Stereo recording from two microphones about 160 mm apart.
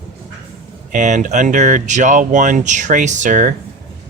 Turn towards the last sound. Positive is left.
turn(degrees=-50)  # may be behind; listen again after turning